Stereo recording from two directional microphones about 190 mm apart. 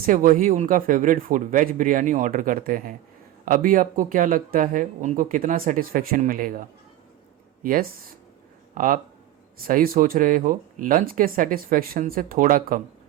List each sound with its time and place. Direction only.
0.0 s speech: 45° right (ahead or behind)